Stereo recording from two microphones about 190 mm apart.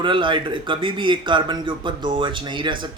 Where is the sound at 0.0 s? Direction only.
25° right (ahead or behind).